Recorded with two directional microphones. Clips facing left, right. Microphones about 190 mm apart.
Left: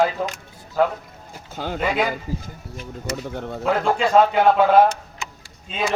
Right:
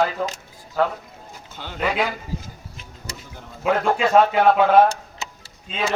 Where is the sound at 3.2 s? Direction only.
65° left (ahead or behind).